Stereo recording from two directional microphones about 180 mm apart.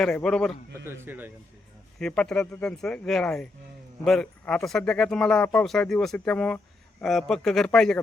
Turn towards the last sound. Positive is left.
turn(degrees=5)  # may be behind; listen again after turning